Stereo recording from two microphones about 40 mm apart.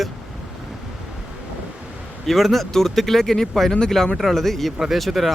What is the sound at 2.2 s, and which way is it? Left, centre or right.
Speech, centre.